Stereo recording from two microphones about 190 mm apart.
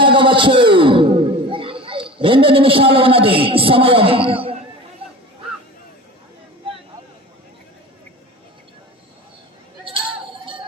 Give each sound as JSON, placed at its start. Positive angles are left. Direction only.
{"t": 0.0, "sound": "speech", "side_deg": -25}